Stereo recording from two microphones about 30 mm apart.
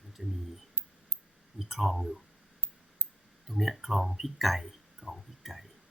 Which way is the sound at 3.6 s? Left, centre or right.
Centre.